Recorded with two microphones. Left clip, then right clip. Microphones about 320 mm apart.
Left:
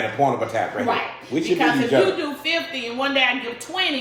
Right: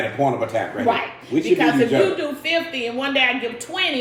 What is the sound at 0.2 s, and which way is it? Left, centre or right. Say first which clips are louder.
Speech: left 1 dB; centre.